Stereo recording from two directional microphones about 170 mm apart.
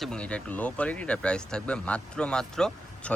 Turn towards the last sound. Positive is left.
turn(degrees=5)  # may be behind; listen again after turning